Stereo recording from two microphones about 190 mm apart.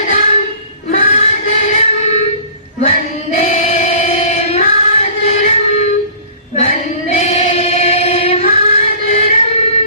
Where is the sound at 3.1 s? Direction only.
35° left (ahead or behind).